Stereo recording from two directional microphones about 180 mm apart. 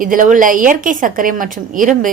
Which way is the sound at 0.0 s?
50° right (ahead or behind).